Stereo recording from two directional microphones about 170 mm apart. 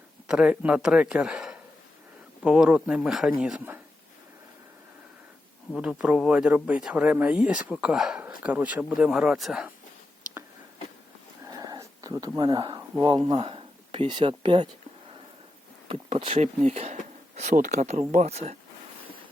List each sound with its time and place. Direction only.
0.3 s speech: 5° right (ahead or behind)
5.7 s speech: 5° right (ahead or behind)
11.4 s a sound: 20° right (ahead or behind)
12.4 s speech: 25° right (ahead or behind)
15.9 s speech: 35° right (ahead or behind)